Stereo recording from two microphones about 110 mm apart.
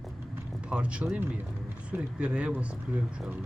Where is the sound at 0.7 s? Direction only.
10° right (ahead or behind).